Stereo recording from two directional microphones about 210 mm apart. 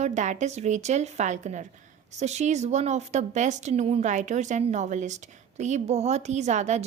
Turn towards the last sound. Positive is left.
turn(degrees=-35)  # may be behind; listen again after turning